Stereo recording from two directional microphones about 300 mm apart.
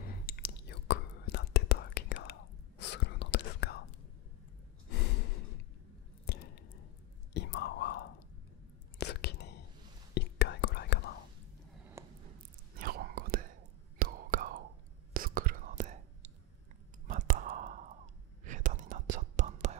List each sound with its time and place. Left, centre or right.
0.0 s whispering: left
6.2 s a sound: left
7.3 s whispering: left
12.0 s a sound: centre
12.7 s whispering: right
17.1 s whispering: right